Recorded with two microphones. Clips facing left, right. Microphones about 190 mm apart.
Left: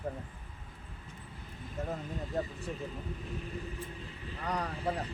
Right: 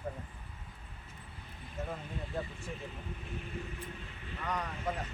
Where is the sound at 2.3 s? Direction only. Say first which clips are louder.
Left 4 dB; 40° left (ahead or behind).